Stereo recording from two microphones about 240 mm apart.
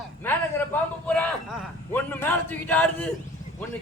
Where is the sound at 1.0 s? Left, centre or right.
Centre.